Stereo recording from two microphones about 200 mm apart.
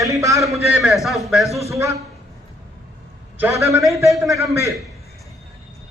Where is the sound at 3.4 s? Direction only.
15° right (ahead or behind).